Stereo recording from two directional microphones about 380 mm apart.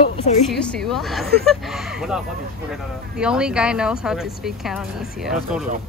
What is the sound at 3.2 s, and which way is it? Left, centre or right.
Speech, centre.